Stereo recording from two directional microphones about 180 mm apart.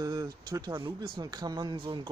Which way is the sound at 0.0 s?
20° right (ahead or behind).